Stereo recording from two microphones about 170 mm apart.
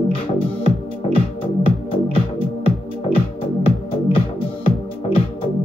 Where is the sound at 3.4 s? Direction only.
30° left (ahead or behind).